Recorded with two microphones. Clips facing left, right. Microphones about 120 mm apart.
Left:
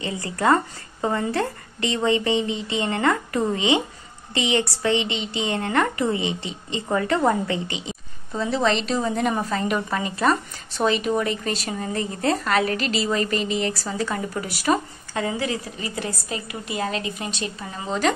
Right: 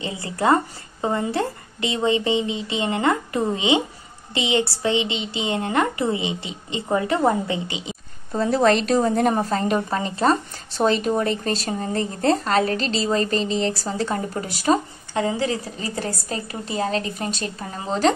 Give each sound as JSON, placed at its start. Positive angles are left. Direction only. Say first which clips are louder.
{"t": 0.0, "sound": "a woman's voice", "louder": "even", "side_deg": -20}
{"t": 8.3, "sound": "a woman's voice", "louder": "right 4 dB", "side_deg": -45}